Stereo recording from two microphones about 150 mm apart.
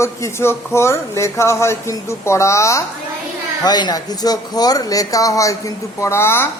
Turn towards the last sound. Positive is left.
turn(degrees=15)  # may be behind; listen again after turning